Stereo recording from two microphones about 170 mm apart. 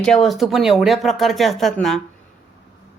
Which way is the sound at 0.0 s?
Centre (ahead or behind).